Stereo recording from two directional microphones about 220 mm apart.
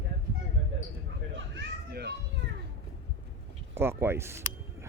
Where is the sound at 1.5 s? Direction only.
45° right (ahead or behind).